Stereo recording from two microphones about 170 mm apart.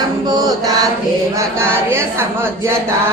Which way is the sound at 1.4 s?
15° right (ahead or behind).